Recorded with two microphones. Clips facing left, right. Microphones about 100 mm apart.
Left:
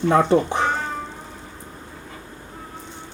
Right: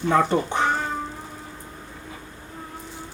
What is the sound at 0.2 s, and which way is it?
Speech, centre (ahead or behind).